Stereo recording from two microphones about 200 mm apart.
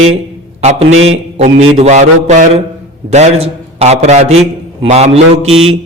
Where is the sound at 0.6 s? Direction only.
35° right (ahead or behind).